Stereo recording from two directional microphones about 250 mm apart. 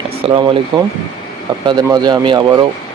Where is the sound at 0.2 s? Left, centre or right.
Centre.